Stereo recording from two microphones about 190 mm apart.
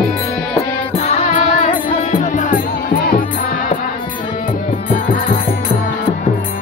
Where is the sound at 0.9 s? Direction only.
35° left (ahead or behind); by 3.3 s 50° left (ahead or behind).